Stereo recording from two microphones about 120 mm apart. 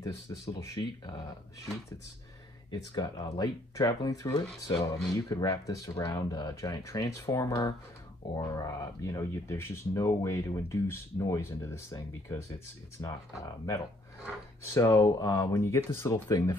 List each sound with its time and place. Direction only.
0.0 s speech: 30° left (ahead or behind)
2.9 s speech: 35° left (ahead or behind)